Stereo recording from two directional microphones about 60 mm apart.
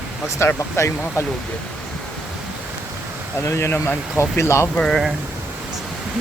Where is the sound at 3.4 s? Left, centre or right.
Left.